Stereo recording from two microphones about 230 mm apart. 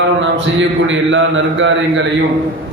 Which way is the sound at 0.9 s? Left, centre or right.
Right.